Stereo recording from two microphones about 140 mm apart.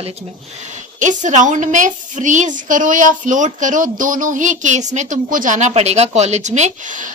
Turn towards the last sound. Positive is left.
turn(degrees=-60)  # may be behind; listen again after turning